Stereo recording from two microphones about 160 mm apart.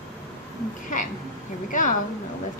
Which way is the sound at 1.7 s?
55° left (ahead or behind).